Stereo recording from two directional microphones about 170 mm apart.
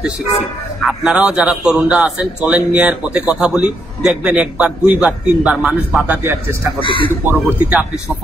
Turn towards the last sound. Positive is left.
turn(degrees=-5)  # may be behind; listen again after turning